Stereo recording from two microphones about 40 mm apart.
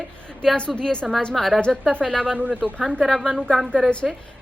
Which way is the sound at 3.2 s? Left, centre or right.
Centre.